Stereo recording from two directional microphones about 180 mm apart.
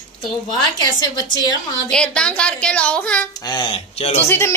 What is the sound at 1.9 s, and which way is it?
A woman's voice, 5° left (ahead or behind).